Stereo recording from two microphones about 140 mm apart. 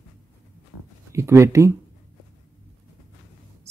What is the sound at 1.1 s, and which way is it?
Speech, 20° right (ahead or behind).